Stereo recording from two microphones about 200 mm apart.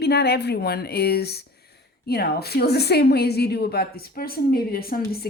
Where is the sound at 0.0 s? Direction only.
55° left (ahead or behind).